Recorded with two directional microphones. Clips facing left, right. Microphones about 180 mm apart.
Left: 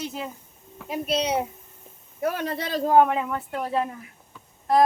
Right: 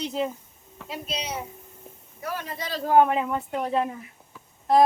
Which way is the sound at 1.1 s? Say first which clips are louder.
Left 10 dB; 65° left (ahead or behind).